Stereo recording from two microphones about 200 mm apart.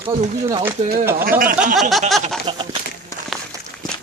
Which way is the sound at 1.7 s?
Centre (ahead or behind).